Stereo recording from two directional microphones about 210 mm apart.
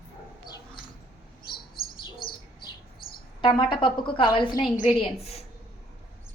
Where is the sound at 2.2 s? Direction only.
45° left (ahead or behind).